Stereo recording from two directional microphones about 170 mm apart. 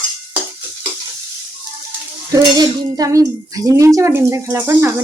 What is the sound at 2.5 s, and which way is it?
A child's voice, 25° right (ahead or behind).